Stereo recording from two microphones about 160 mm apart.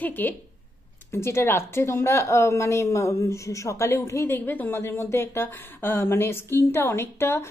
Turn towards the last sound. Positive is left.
turn(degrees=15)  # may be behind; listen again after turning